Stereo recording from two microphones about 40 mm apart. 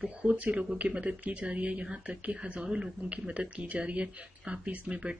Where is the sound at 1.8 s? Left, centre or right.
Right.